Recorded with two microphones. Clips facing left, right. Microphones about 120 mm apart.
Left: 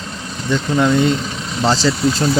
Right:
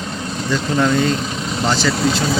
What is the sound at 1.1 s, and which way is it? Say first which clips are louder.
Vehicle: right 2 dB; 20° right (ahead or behind).